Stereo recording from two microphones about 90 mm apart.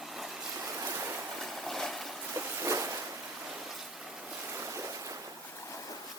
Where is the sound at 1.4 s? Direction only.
Centre (ahead or behind).